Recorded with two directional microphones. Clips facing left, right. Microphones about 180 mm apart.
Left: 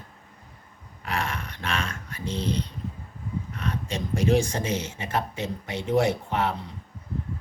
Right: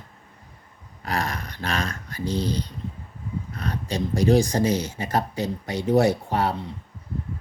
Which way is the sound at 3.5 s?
35° right (ahead or behind).